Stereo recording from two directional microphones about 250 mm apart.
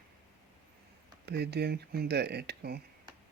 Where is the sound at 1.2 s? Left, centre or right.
Right.